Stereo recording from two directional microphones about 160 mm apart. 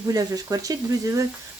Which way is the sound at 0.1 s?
20° right (ahead or behind).